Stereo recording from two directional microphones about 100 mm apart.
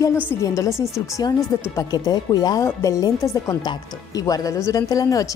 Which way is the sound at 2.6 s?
30° left (ahead or behind).